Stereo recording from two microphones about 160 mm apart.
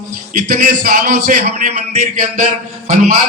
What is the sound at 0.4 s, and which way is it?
A man's voice, 60° right (ahead or behind).